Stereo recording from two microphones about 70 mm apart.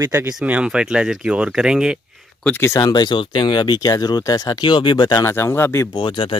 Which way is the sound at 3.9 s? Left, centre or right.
Left.